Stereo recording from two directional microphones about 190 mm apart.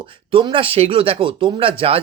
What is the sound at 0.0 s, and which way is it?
Speech, 30° right (ahead or behind).